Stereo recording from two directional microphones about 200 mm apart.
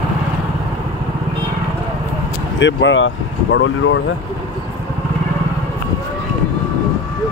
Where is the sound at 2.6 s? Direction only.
70° left (ahead or behind).